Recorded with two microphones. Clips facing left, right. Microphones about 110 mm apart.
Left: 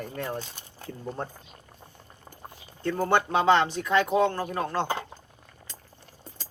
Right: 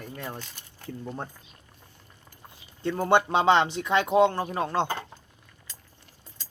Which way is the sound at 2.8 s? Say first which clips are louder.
Right 2 dB; 20° right (ahead or behind).